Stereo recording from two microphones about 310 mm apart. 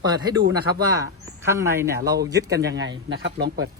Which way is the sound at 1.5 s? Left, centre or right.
Centre.